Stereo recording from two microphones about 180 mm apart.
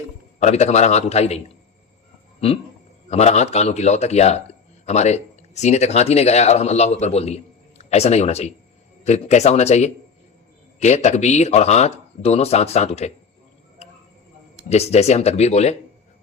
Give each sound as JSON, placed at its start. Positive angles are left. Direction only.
{"t": 0.3, "sound": "speech", "side_deg": 40}
{"t": 3.1, "sound": "a man's voice", "side_deg": 40}
{"t": 14.7, "sound": "speech", "side_deg": 35}